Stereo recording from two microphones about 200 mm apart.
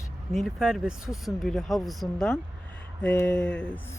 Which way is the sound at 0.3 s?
Centre (ahead or behind).